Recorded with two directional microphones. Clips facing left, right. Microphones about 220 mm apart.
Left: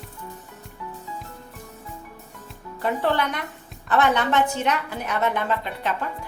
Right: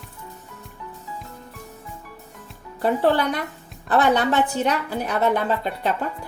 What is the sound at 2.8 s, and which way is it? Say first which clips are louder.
A woman's voice: right 4 dB; 35° right (ahead or behind).